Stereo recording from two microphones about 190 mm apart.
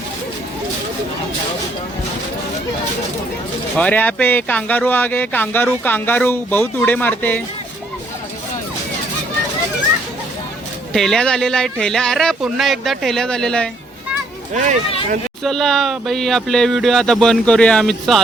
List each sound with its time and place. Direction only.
3.8 s speech: 5° left (ahead or behind)
10.9 s speech: centre (ahead or behind)
14.5 s speech: 40° right (ahead or behind)
15.4 s speech: centre (ahead or behind)